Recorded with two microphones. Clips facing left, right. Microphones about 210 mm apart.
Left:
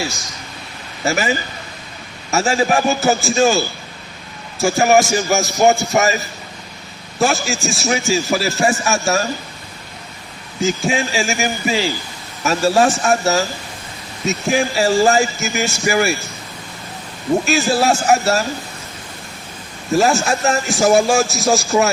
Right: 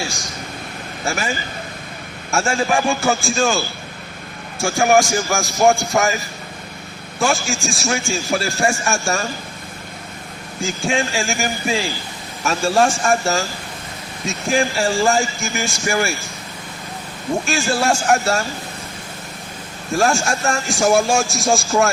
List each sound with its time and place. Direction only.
1.0 s a man's voice: centre (ahead or behind)
4.6 s a man's voice: 5° left (ahead or behind)
7.2 s a man's voice: centre (ahead or behind)
10.6 s a man's voice: centre (ahead or behind)
17.4 s a man's voice: centre (ahead or behind)
19.9 s a man's voice: centre (ahead or behind)